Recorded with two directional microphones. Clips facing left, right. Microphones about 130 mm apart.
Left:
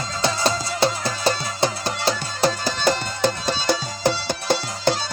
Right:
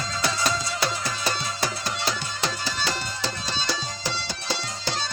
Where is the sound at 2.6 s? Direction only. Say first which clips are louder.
Left 8 dB; 50° left (ahead or behind).